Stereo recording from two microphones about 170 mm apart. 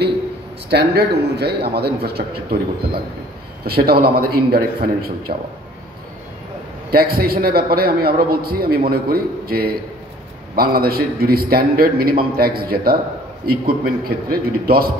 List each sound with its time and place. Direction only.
0.7 s a man's voice: 70° right (ahead or behind)
6.9 s a man's voice: 65° right (ahead or behind)